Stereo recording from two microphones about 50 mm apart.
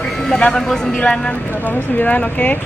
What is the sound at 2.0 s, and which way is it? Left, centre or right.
Speech, left.